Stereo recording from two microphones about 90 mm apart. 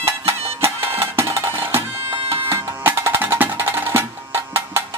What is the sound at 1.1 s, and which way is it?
Music, 30° right (ahead or behind).